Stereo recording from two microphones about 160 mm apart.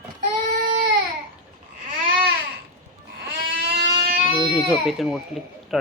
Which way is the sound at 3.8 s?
30° right (ahead or behind).